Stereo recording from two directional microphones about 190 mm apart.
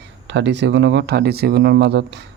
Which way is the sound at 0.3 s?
65° right (ahead or behind).